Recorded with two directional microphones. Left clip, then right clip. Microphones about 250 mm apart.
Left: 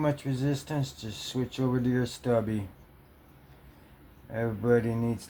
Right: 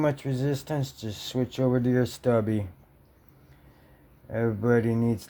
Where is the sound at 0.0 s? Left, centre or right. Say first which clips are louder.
Right 3 dB; right.